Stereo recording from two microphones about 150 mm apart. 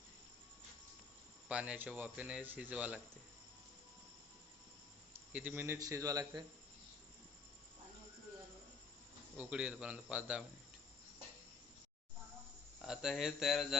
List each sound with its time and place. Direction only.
1.5 s speech: 10° right (ahead or behind)
5.3 s a man's voice: 10° right (ahead or behind); by 6.4 s 25° right (ahead or behind)
9.4 s speech: 5° right (ahead or behind)
12.8 s speech: 5° right (ahead or behind)